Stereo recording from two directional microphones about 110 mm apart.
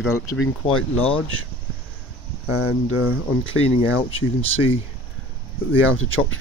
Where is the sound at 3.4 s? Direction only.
55° left (ahead or behind).